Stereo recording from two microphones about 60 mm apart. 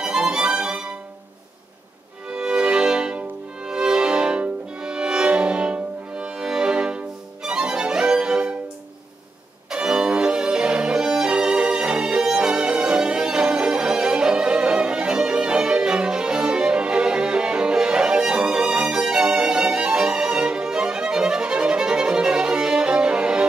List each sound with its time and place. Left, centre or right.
0.0 s music: centre
2.2 s music: centre
9.7 s violin: centre